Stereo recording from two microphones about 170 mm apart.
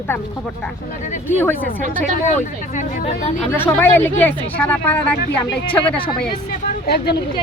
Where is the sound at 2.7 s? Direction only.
40° left (ahead or behind).